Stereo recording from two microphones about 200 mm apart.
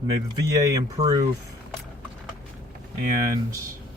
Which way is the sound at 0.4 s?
15° right (ahead or behind).